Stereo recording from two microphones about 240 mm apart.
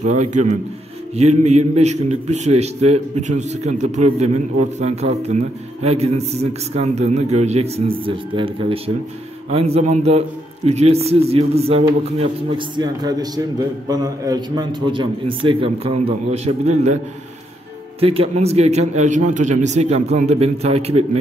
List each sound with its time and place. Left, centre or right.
0.0 s a man's voice: right
18.0 s a man's voice: right